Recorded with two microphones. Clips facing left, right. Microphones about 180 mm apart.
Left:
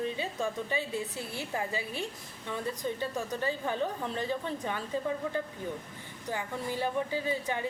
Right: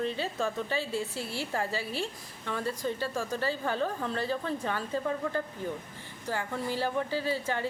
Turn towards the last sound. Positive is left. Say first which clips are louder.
# right 1 dB
turn(degrees=15)  # may be behind; listen again after turning